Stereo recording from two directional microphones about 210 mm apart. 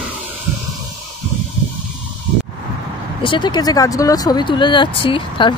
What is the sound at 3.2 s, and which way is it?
Speech, 20° left (ahead or behind).